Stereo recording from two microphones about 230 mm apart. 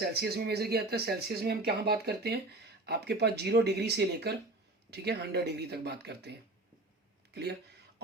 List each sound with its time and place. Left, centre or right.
0.0 s speech: right